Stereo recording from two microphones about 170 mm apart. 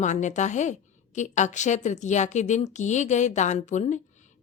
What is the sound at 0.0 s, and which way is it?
A woman's voice, 45° left (ahead or behind).